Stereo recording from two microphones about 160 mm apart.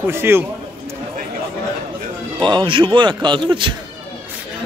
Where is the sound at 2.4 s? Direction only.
30° right (ahead or behind).